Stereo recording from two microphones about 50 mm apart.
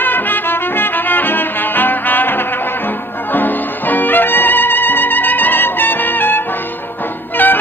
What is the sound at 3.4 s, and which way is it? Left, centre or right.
Music, left.